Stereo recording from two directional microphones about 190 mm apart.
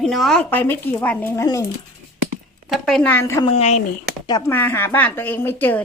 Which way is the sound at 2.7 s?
Centre (ahead or behind).